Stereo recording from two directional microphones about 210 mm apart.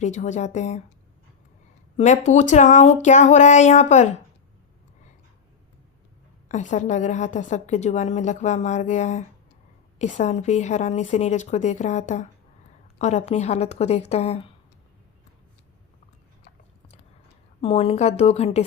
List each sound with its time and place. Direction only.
0.0 s a woman's voice: 35° left (ahead or behind)
2.0 s a woman's voice: 35° left (ahead or behind)
6.5 s a woman's voice: 35° left (ahead or behind)
17.6 s a woman's voice: 25° left (ahead or behind)